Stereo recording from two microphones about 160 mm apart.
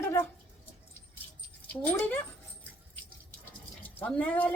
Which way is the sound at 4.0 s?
10° left (ahead or behind).